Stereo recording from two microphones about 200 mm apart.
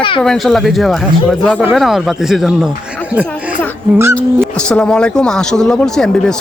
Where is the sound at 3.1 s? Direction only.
5° right (ahead or behind).